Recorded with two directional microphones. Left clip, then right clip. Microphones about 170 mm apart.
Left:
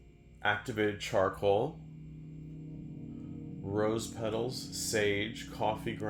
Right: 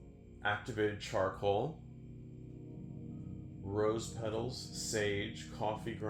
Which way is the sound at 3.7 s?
45° left (ahead or behind).